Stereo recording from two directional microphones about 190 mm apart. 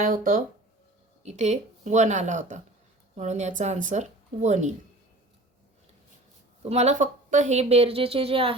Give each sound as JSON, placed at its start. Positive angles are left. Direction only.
{"t": 0.0, "sound": "speech", "side_deg": -45}
{"t": 6.7, "sound": "speech", "side_deg": -35}